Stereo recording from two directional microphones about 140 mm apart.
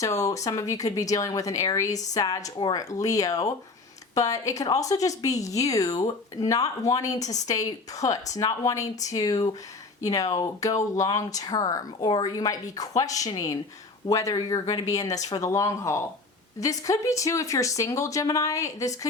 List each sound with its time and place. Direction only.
0.0 s a woman's voice: 25° left (ahead or behind)